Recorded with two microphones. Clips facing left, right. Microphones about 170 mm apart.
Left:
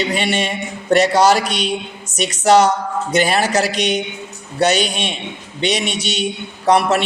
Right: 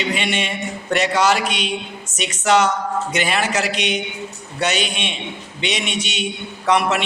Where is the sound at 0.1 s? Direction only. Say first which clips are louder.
Left 3 dB; 40° left (ahead or behind).